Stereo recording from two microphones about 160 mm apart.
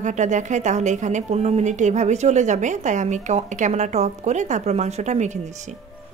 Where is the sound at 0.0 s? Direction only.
50° right (ahead or behind).